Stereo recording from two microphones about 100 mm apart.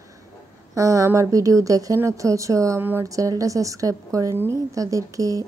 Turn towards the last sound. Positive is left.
turn(degrees=-35)  # may be behind; listen again after turning